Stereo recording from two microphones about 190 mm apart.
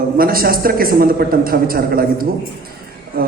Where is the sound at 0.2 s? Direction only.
50° right (ahead or behind).